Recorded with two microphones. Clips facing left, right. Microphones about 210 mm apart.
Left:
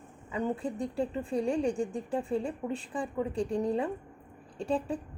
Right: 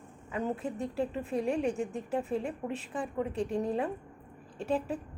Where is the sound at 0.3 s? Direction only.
5° right (ahead or behind).